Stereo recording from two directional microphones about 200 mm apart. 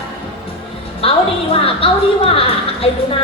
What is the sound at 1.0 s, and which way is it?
A woman's voice, 30° left (ahead or behind).